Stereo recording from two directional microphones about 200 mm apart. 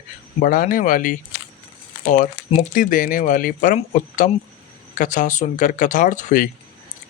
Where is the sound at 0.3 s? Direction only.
45° left (ahead or behind).